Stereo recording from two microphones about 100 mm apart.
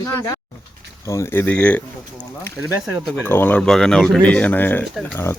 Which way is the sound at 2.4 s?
25° left (ahead or behind).